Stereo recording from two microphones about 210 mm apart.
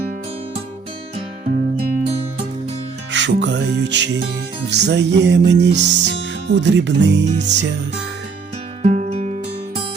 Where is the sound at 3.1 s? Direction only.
60° right (ahead or behind).